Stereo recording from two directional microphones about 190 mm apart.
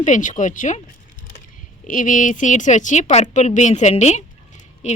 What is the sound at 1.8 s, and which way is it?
A man's voice, 45° left (ahead or behind).